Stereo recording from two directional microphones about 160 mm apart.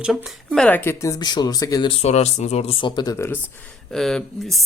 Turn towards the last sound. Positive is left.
turn(degrees=0)  # may be behind; listen again after turning